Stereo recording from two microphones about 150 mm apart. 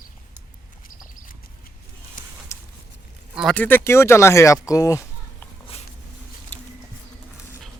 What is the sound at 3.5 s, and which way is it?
Speech, 10° left (ahead or behind).